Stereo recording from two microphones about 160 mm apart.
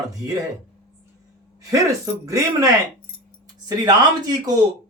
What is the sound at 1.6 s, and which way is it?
Speech, 20° right (ahead or behind).